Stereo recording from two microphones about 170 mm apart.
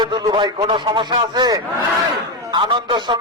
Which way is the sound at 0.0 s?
25° right (ahead or behind).